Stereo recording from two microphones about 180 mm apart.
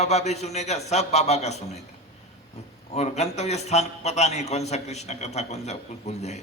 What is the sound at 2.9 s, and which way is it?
A man's voice, 40° left (ahead or behind).